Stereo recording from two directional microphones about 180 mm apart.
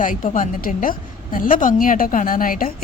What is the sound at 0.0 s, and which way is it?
A woman's voice, 45° left (ahead or behind).